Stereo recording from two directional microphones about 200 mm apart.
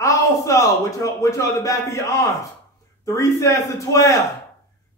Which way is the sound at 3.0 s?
15° left (ahead or behind).